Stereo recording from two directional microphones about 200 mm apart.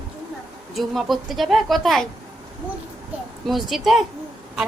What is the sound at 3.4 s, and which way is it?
Speech, centre (ahead or behind).